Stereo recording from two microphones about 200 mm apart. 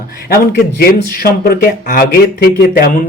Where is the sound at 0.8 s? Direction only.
45° left (ahead or behind).